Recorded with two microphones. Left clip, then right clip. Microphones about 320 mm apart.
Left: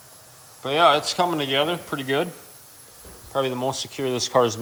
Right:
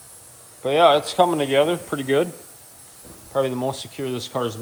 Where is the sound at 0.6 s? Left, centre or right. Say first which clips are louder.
Right 2 dB; centre.